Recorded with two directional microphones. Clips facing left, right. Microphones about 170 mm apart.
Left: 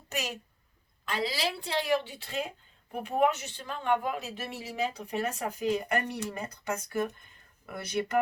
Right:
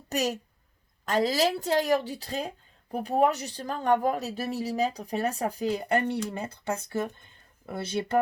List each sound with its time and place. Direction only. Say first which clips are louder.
0.1 s a woman's voice: right 7 dB; 40° right (ahead or behind)